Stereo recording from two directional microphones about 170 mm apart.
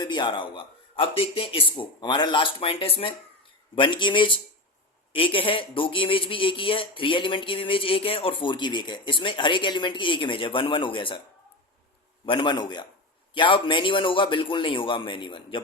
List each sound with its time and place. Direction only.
0.0 s a man's voice: 25° left (ahead or behind)
12.2 s a man's voice: 30° left (ahead or behind)